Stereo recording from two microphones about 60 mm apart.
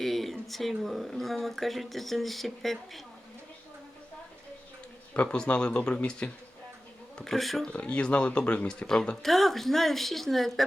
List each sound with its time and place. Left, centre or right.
0.0 s speech: centre
5.1 s speech: centre
7.3 s speech: centre
7.7 s speech: left; by 10.5 s centre